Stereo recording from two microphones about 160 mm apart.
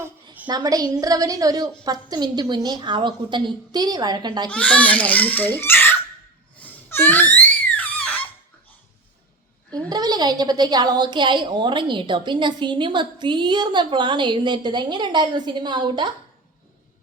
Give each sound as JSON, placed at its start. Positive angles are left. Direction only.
{"t": 0.4, "sound": "a woman's voice", "side_deg": -25}
{"t": 4.4, "sound": "a child's voice", "side_deg": 5}
{"t": 6.6, "sound": "a sound", "side_deg": 15}
{"t": 7.8, "sound": "squeak", "side_deg": 10}
{"t": 9.9, "sound": "a woman's voice", "side_deg": -25}